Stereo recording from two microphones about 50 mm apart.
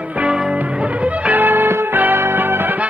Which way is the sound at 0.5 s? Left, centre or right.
Right.